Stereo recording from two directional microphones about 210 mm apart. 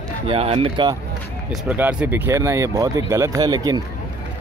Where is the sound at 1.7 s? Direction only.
5° right (ahead or behind).